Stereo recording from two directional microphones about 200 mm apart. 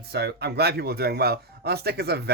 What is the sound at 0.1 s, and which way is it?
Speech, 55° right (ahead or behind).